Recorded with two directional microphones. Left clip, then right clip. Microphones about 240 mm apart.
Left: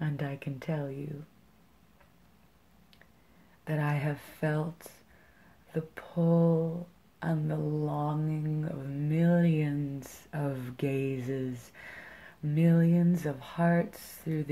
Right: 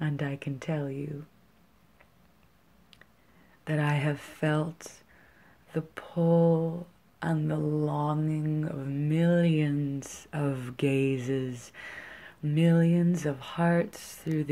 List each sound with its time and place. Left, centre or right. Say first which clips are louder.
0.0 s speech: right 3 dB; centre
3.6 s mantra: right 4 dB; centre